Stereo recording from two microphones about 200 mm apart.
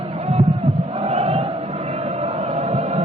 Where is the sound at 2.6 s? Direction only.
30° right (ahead or behind).